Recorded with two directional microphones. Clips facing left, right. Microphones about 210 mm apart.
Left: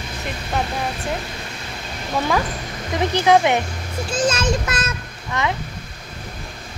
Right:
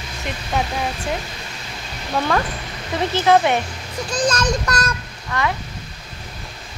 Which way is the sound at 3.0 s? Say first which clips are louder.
Even; 15° left (ahead or behind).